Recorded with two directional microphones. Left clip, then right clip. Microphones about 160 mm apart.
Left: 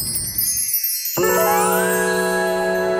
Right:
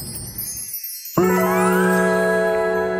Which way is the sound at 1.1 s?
Centre (ahead or behind).